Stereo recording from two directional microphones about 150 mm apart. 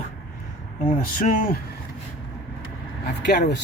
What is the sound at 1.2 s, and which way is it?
Speech, 70° left (ahead or behind).